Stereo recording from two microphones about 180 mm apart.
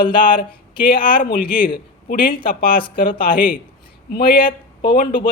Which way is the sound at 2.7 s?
30° left (ahead or behind).